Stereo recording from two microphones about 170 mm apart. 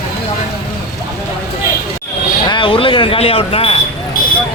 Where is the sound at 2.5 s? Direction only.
30° left (ahead or behind).